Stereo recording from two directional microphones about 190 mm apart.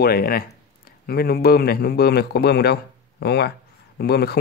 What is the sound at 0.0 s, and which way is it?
Speech, 55° left (ahead or behind).